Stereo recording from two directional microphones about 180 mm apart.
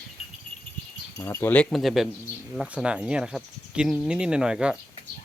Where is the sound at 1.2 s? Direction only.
15° left (ahead or behind); by 4.8 s 5° right (ahead or behind).